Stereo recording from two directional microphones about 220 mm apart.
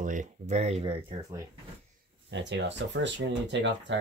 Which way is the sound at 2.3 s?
55° right (ahead or behind).